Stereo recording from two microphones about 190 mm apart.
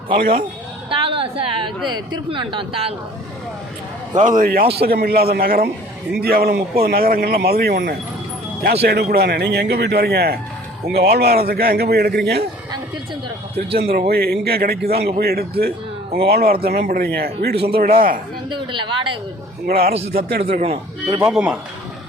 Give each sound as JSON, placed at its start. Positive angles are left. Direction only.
{"t": 0.1, "sound": "a man's voice", "side_deg": -50}
{"t": 0.9, "sound": "a woman's voice", "side_deg": -30}
{"t": 4.1, "sound": "a man's voice", "side_deg": -40}
{"t": 13.7, "sound": "a man's voice", "side_deg": -55}
{"t": 18.5, "sound": "a woman's voice", "side_deg": -25}
{"t": 19.6, "sound": "a man's voice", "side_deg": -50}
{"t": 20.4, "sound": "speech", "side_deg": -30}
{"t": 21.2, "sound": "speech", "side_deg": -5}